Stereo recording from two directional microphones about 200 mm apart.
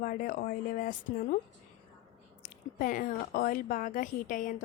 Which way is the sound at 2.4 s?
40° left (ahead or behind).